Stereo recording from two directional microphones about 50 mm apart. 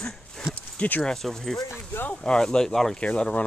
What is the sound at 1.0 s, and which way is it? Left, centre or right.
Speech, centre.